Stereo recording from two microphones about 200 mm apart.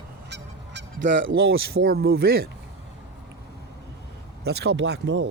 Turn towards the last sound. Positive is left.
turn(degrees=-65)  # may be behind; listen again after turning